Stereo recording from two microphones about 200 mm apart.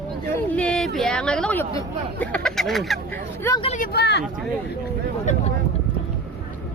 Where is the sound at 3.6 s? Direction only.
35° left (ahead or behind).